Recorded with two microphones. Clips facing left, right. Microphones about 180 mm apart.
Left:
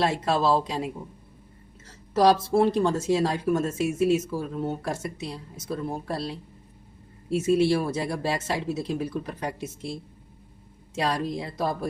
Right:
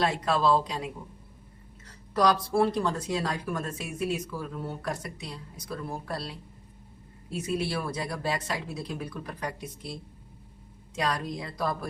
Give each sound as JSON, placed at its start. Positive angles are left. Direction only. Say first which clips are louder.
{"t": 0.0, "sound": "speech", "louder": "left 2 dB", "side_deg": 25}
{"t": 2.1, "sound": "speech", "louder": "left 4 dB", "side_deg": 25}
{"t": 7.3, "sound": "speech", "louder": "left 9 dB", "side_deg": 25}